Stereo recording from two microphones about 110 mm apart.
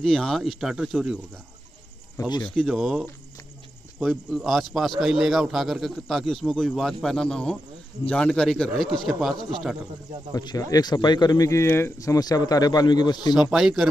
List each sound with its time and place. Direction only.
0.0 s a man's voice: 5° left (ahead or behind)
2.1 s speech: 40° left (ahead or behind)
2.5 s a man's voice: centre (ahead or behind)
10.3 s speech: 35° left (ahead or behind)
13.3 s a man's voice: 5° right (ahead or behind)